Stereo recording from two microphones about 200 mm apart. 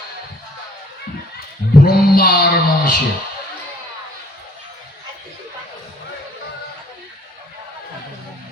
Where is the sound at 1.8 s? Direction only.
50° left (ahead or behind).